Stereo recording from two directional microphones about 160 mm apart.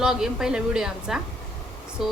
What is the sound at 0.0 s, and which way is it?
A woman's voice, 5° right (ahead or behind).